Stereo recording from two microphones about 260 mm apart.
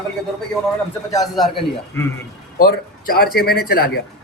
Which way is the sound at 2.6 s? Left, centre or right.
Left.